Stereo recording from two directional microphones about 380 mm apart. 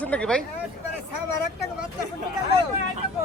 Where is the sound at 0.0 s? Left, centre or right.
Centre.